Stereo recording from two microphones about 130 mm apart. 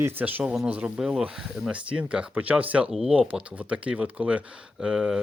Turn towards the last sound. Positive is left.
turn(degrees=-5)  # may be behind; listen again after turning